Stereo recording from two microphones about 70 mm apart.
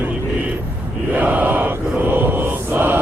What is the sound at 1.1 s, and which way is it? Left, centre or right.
Mantra, right.